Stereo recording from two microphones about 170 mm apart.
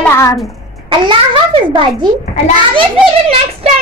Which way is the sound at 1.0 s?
30° right (ahead or behind).